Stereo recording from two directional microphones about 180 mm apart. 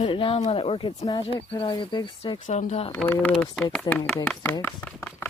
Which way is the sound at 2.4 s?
40° left (ahead or behind).